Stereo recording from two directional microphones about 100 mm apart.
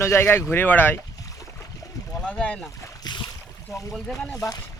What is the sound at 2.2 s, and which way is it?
Speech, 10° left (ahead or behind).